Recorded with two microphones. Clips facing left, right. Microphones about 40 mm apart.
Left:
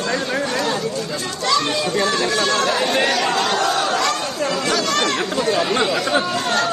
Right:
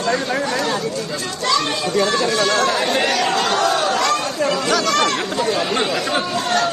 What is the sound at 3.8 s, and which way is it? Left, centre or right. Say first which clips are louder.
Chatter: right 2 dB; right.